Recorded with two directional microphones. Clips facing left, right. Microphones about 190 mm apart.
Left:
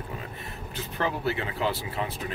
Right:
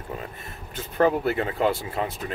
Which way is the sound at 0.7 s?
50° right (ahead or behind).